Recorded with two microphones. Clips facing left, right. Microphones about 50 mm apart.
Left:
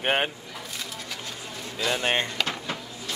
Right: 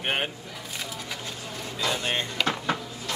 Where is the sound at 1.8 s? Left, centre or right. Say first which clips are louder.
Left 3 dB; left.